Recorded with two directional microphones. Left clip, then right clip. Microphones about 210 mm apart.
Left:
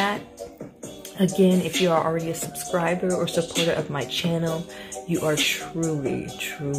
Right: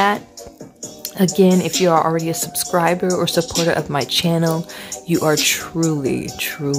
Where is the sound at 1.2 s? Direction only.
35° right (ahead or behind).